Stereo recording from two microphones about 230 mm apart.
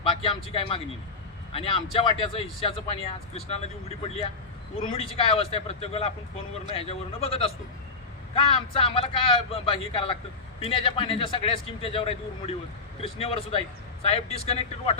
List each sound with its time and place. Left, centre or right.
0.0 s speech: left